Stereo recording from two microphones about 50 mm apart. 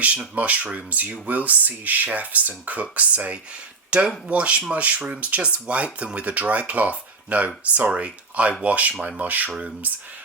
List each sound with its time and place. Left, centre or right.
0.3 s speech: right